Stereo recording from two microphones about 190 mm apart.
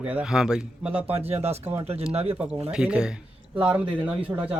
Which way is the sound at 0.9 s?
30° right (ahead or behind).